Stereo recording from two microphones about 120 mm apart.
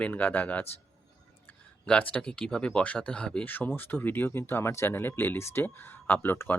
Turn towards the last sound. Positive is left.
turn(degrees=15)  # may be behind; listen again after turning